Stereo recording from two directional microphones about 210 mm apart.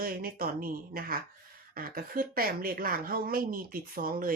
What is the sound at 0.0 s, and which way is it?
Speech, 45° right (ahead or behind).